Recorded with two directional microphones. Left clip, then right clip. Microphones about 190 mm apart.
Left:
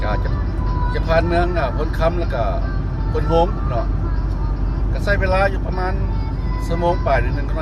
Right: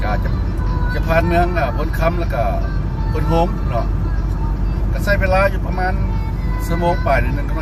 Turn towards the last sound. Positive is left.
turn(degrees=5)  # may be behind; listen again after turning